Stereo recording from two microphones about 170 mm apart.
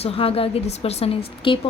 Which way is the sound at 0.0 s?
35° left (ahead or behind).